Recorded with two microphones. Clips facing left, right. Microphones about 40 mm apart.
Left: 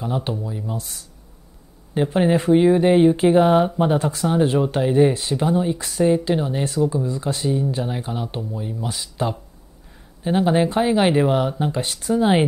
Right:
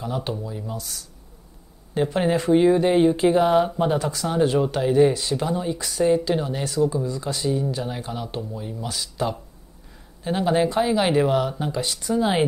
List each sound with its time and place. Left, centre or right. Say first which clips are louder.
0.0 s speech: left 3 dB; centre
0.7 s speech: left 2 dB; left
2.1 s speech: left 3 dB; centre
5.8 s speech: left 2 dB; left
6.0 s speech: left 2 dB; centre
7.1 s speech: left 2 dB; left
7.8 s speech: left 3 dB; centre
8.8 s speech: left 1 dB; left
10.7 s speech: left 3 dB; left
11.8 s speech: left 2 dB; left